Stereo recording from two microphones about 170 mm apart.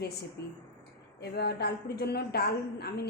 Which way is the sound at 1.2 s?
70° left (ahead or behind).